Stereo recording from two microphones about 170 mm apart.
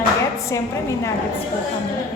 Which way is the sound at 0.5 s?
15° left (ahead or behind).